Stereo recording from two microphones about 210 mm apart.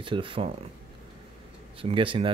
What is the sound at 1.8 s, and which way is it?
Speech, 25° right (ahead or behind).